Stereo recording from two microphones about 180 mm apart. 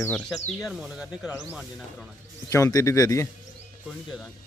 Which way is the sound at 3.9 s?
Centre (ahead or behind).